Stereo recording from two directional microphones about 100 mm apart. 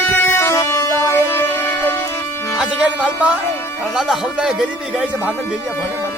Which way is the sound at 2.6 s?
10° right (ahead or behind).